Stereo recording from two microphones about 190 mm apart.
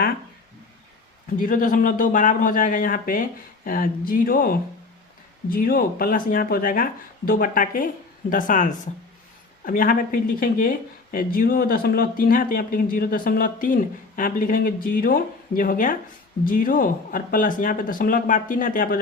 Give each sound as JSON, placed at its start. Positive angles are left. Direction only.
{"t": 1.4, "sound": "speech", "side_deg": 45}